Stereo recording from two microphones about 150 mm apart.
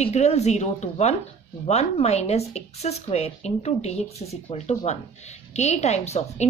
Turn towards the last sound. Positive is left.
turn(degrees=45)  # may be behind; listen again after turning